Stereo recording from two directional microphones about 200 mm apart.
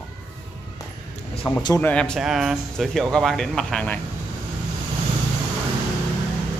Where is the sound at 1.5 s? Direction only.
20° left (ahead or behind).